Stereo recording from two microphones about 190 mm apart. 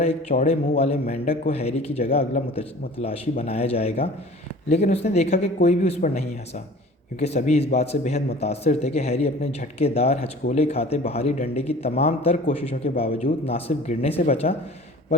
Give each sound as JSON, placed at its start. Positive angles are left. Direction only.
{"t": 0.0, "sound": "speech", "side_deg": 35}